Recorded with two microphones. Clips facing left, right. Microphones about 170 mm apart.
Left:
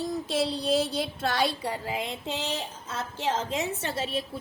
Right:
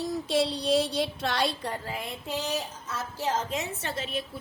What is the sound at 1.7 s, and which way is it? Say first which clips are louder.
A woman's voice: left 3 dB; 15° left (ahead or behind).